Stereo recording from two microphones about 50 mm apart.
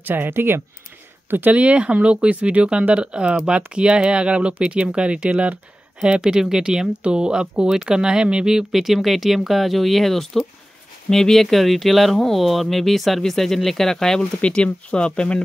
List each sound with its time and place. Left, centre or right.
0.0 s speech: right
1.5 s speech: right; by 14.2 s centre
14.4 s speech: left